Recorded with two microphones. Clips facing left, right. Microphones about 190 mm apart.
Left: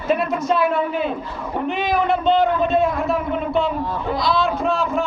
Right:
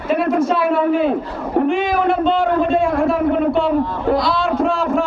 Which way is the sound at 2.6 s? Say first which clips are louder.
Right 3 dB; 50° right (ahead or behind).